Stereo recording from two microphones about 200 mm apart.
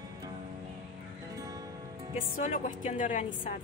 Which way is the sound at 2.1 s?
40° left (ahead or behind).